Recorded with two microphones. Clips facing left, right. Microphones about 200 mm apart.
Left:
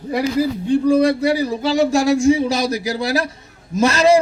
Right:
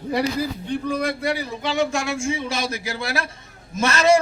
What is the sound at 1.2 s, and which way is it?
A man's voice, 40° left (ahead or behind).